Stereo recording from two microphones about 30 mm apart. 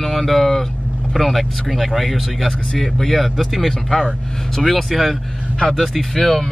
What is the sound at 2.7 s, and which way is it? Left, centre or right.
Speech, centre.